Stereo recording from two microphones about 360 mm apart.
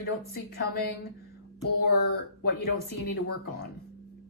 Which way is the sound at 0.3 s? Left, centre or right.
Left.